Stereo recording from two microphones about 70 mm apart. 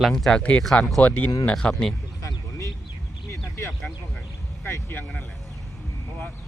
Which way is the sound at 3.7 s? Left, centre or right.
Centre.